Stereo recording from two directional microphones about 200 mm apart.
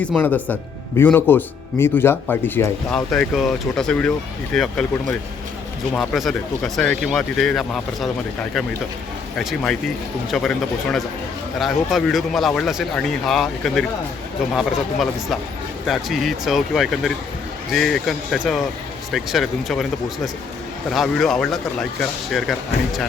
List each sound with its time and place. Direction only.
0.0 s speech: 5° left (ahead or behind)
9.4 s speech: centre (ahead or behind)